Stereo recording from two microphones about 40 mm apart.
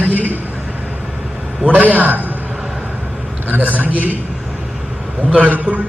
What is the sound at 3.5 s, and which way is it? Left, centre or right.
Speech, right.